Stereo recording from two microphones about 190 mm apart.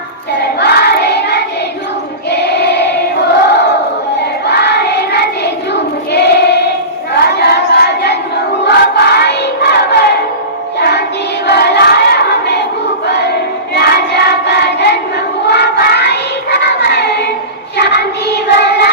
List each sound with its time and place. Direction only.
0.4 s choir: 60° left (ahead or behind)
4.4 s child singing: 60° left (ahead or behind)
10.8 s music: 60° left (ahead or behind)
11.4 s a sound: 60° left (ahead or behind)
13.1 s child singing: 60° left (ahead or behind)